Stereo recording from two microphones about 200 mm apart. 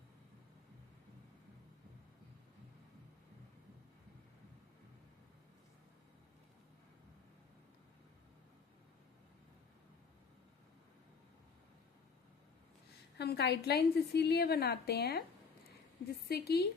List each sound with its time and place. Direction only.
13.1 s a woman's voice: 55° left (ahead or behind)
16.3 s a woman's voice: 50° left (ahead or behind)